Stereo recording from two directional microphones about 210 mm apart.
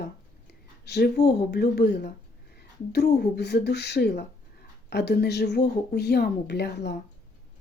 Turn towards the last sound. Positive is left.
turn(degrees=50)  # may be behind; listen again after turning